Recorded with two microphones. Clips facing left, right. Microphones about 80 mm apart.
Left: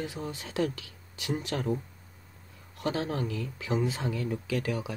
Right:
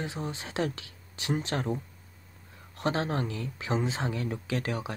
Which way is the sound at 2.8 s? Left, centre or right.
Right.